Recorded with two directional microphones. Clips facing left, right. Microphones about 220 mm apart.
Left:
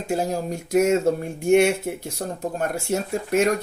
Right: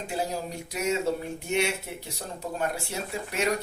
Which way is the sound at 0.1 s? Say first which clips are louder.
Left 8 dB; 45° left (ahead or behind).